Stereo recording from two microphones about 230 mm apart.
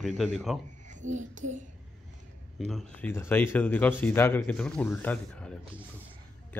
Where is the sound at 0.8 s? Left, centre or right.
Right.